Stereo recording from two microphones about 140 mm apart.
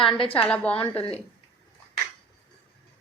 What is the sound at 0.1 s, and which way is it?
Speech, 40° left (ahead or behind).